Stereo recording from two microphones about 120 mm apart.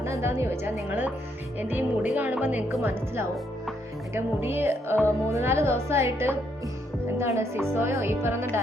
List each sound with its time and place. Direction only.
0.0 s speech: 20° right (ahead or behind)
2.1 s speech: 15° right (ahead or behind)